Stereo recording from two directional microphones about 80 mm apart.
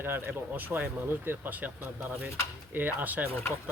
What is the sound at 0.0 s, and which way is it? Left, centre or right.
Speech, right.